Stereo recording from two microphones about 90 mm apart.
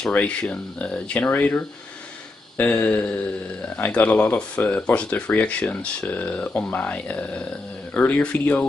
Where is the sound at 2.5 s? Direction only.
20° left (ahead or behind).